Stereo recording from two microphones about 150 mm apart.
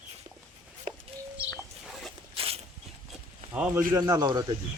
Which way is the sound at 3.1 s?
5° right (ahead or behind).